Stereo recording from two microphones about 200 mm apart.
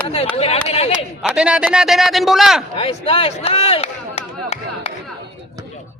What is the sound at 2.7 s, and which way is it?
Speech, 30° left (ahead or behind).